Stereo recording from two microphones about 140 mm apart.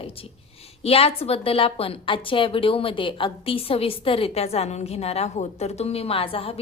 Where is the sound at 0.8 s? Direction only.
45° left (ahead or behind).